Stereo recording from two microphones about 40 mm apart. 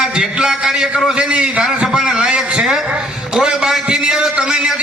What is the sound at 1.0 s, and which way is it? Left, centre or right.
Speech, centre.